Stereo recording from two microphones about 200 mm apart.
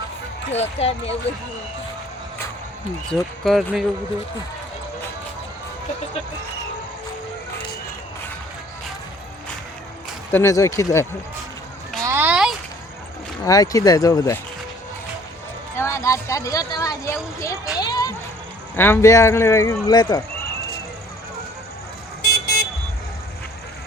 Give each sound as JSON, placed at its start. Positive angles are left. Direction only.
{"t": 0.5, "sound": "speech", "side_deg": 30}
{"t": 3.1, "sound": "speech", "side_deg": 0}
{"t": 10.3, "sound": "speech", "side_deg": 15}
{"t": 12.0, "sound": "a sound", "side_deg": -10}
{"t": 13.4, "sound": "speech", "side_deg": 20}
{"t": 15.7, "sound": "speech", "side_deg": 15}
{"t": 22.2, "sound": "vehicle", "side_deg": 50}